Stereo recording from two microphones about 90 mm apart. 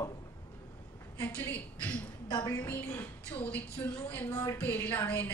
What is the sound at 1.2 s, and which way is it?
Speech, 20° left (ahead or behind).